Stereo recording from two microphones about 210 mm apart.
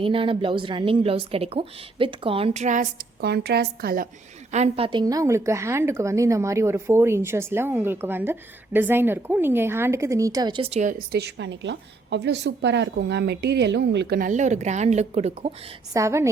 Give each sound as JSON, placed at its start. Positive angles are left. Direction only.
{"t": 0.0, "sound": "a woman's voice", "side_deg": -25}
{"t": 3.2, "sound": "a woman's voice", "side_deg": -50}
{"t": 4.5, "sound": "a woman's voice", "side_deg": -30}
{"t": 15.9, "sound": "a woman's voice", "side_deg": -15}